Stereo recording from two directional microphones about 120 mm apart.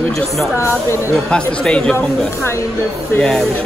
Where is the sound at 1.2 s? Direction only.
5° left (ahead or behind).